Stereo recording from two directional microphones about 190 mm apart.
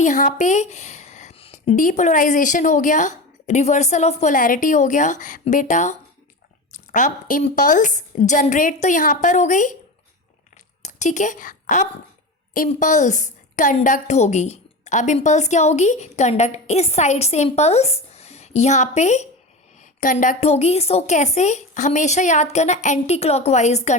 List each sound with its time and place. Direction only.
0.0 s a woman's voice: 40° left (ahead or behind)
10.8 s a woman's voice: 40° left (ahead or behind)